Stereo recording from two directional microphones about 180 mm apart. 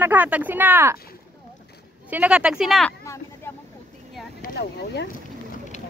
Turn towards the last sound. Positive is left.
turn(degrees=65)  # may be behind; listen again after turning